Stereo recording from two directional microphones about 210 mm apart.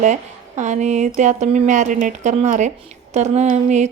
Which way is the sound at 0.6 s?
35° right (ahead or behind).